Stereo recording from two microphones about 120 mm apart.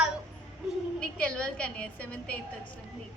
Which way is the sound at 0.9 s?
10° left (ahead or behind).